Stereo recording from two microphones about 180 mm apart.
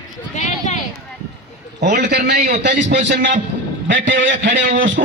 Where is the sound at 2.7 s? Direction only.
80° right.